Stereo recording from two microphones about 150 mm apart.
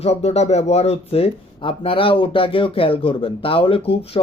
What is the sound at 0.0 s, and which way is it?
Speech, 45° left (ahead or behind).